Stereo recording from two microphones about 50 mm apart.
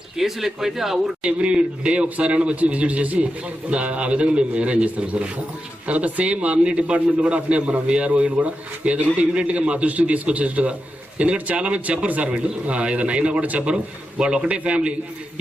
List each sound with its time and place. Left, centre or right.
0.2 s speech: centre
1.2 s a man's voice: centre
14.2 s a man's voice: centre